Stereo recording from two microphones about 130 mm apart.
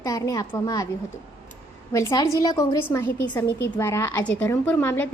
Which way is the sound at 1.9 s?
25° left (ahead or behind).